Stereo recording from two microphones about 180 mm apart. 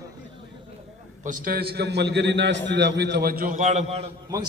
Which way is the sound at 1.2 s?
55° right (ahead or behind).